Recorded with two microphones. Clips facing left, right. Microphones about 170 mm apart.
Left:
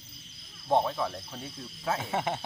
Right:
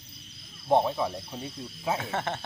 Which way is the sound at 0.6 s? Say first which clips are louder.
Right 3 dB; 15° right (ahead or behind).